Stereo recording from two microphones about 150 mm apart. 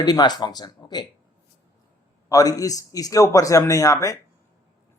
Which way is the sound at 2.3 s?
25° left (ahead or behind).